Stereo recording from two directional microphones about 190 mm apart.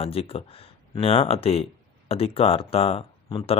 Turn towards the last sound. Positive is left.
turn(degrees=30)  # may be behind; listen again after turning